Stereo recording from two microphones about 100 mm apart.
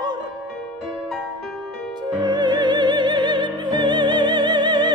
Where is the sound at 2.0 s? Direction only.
45° right (ahead or behind).